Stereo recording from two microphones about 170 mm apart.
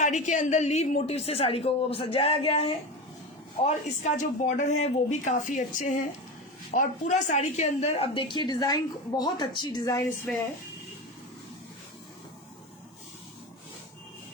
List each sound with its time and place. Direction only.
0.0 s a woman's voice: 45° left (ahead or behind)
3.6 s a woman's voice: 45° left (ahead or behind); by 10.0 s 25° left (ahead or behind)